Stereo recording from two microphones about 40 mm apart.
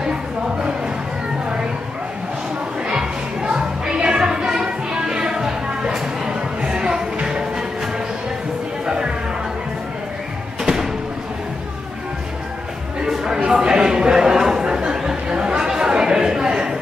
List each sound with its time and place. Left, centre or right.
0.0 s music: right
2.9 s music: right
6.2 s a sound: centre
7.2 s music: centre
10.6 s bird: centre
13.0 s a sound: centre
15.4 s chatter: centre